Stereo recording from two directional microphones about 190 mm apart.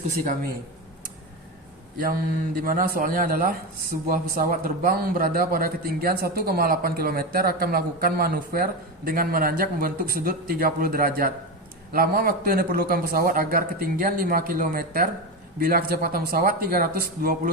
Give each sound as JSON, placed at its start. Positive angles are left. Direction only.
{"t": 2.0, "sound": "a man's voice", "side_deg": -50}